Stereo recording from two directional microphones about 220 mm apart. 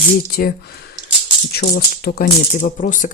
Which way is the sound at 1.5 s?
45° left (ahead or behind).